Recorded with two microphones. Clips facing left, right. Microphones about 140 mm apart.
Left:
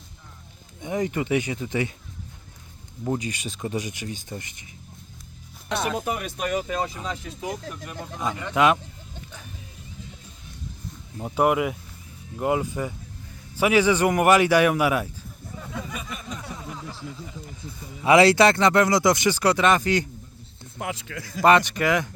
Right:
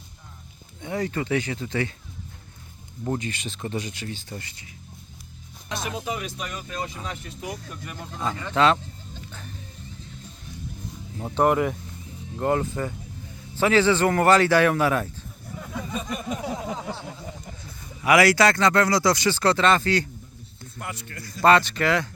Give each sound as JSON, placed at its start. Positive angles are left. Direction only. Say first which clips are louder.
{"t": 0.8, "sound": "speech", "louder": "left 2 dB", "side_deg": 15}
{"t": 3.0, "sound": "speech", "louder": "left 1 dB", "side_deg": 10}
{"t": 5.6, "sound": "speech", "louder": "left 4 dB", "side_deg": 65}
{"t": 8.2, "sound": "speech", "louder": "even", "side_deg": 10}
{"t": 11.2, "sound": "speech", "louder": "even", "side_deg": 5}
{"t": 15.9, "sound": "a sound", "louder": "right 5 dB", "side_deg": -30}
{"t": 16.1, "sound": "a sound", "louder": "right 6 dB", "side_deg": -50}
{"t": 16.4, "sound": "a sound", "louder": "right 7 dB", "side_deg": -85}
{"t": 18.0, "sound": "speech", "louder": "left 2 dB", "side_deg": 25}
{"t": 20.7, "sound": "speech", "louder": "left 5 dB", "side_deg": 90}
{"t": 21.4, "sound": "speech", "louder": "even", "side_deg": 15}